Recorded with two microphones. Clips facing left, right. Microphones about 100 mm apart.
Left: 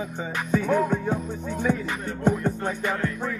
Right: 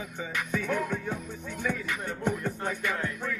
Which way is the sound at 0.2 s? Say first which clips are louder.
Left 6 dB; 30° left (ahead or behind).